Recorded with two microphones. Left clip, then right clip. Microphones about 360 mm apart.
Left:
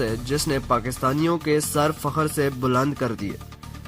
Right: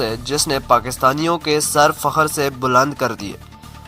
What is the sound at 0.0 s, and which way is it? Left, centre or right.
Speech, centre.